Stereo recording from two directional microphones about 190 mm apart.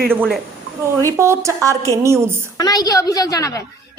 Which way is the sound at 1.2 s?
15° right (ahead or behind).